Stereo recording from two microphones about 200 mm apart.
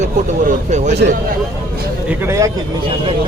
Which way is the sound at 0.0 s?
35° right (ahead or behind).